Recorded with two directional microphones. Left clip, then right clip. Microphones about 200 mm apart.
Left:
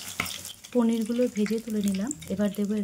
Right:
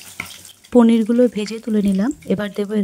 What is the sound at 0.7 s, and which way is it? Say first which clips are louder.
Speech: right 12 dB; 45° right (ahead or behind).